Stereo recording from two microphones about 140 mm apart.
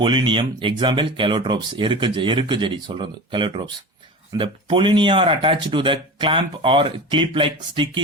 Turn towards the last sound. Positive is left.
turn(degrees=-40)  # may be behind; listen again after turning